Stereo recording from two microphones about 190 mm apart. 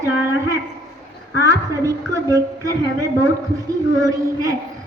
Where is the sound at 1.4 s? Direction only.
15° right (ahead or behind).